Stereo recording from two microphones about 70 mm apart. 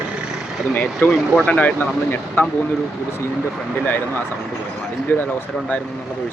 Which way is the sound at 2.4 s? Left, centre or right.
Left.